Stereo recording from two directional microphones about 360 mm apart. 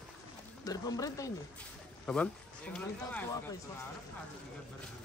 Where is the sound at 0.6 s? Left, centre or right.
Centre.